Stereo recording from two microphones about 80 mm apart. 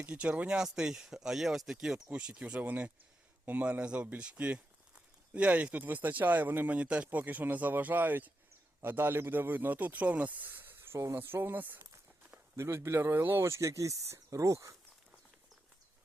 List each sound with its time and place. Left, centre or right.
0.0 s speech: centre
12.5 s speech: right